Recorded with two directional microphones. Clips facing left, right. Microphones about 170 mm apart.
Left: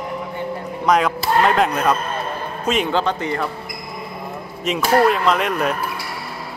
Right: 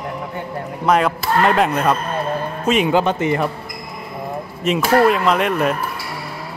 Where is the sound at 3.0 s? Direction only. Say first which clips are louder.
Right 3 dB; 20° right (ahead or behind).